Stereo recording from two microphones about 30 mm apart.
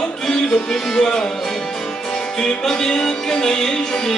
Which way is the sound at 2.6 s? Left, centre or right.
Centre.